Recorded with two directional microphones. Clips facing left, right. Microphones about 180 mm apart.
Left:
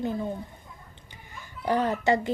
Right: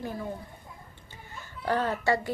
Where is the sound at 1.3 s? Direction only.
15° left (ahead or behind).